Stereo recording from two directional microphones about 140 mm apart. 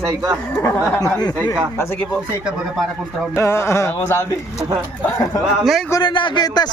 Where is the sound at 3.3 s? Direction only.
20° left (ahead or behind).